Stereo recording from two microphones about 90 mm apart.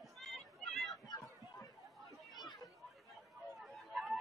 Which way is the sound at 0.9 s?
45° left (ahead or behind).